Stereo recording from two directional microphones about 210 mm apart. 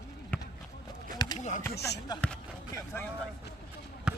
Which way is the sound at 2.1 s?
20° left (ahead or behind).